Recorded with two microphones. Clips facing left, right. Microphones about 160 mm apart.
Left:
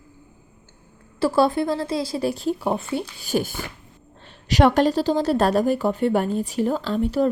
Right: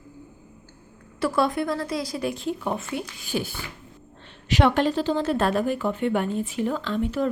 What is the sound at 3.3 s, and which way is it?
A woman's voice, 45° left (ahead or behind).